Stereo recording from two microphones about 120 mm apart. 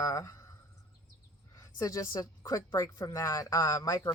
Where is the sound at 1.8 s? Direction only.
25° left (ahead or behind).